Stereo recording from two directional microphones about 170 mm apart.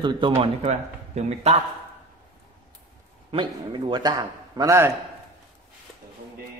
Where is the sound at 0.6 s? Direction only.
40° right (ahead or behind).